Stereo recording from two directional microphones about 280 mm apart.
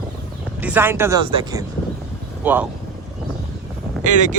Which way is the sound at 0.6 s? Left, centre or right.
Centre.